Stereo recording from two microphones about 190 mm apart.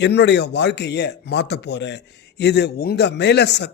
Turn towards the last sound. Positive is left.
turn(degrees=60)  # may be behind; listen again after turning